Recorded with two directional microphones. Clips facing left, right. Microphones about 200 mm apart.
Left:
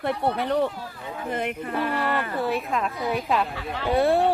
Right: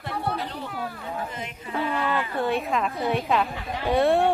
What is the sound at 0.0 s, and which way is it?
A woman's voice, 60° left (ahead or behind).